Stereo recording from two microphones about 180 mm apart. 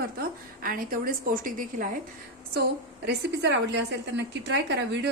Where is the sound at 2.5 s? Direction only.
65° right (ahead or behind).